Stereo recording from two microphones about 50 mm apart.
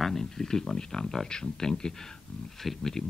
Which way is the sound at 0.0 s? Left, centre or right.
Centre.